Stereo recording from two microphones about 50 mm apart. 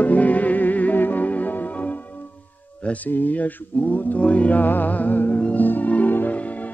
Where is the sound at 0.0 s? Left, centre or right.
Left.